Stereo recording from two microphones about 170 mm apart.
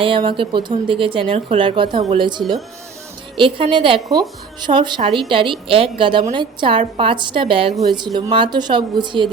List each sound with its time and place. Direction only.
0.0 s a woman's voice: 30° right (ahead or behind)